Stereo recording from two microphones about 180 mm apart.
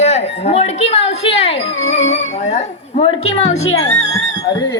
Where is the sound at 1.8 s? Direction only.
90° left.